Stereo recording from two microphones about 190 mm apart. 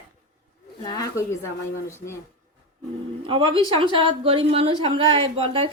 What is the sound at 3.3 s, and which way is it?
A woman's voice, 25° right (ahead or behind).